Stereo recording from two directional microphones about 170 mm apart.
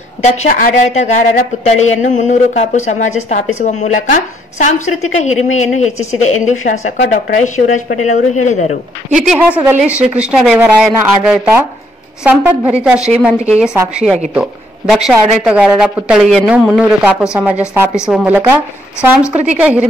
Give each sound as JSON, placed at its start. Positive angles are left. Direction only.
{"t": 0.2, "sound": "a woman's voice", "side_deg": 40}
{"t": 9.1, "sound": "a woman's voice", "side_deg": -5}